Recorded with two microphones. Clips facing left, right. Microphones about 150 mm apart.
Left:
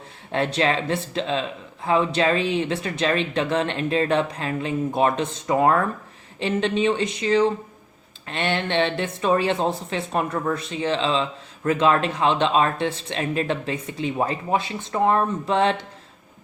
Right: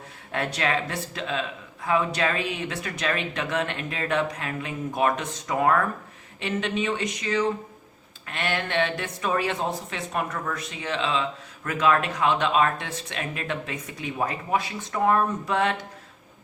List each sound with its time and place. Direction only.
0.3 s speech: 25° left (ahead or behind)